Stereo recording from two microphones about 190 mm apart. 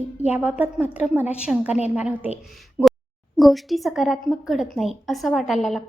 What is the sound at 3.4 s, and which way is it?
A woman's voice, centre (ahead or behind).